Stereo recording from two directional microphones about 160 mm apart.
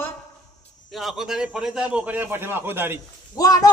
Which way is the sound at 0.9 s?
Centre (ahead or behind).